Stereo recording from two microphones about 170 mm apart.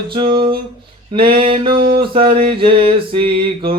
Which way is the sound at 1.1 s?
30° right (ahead or behind).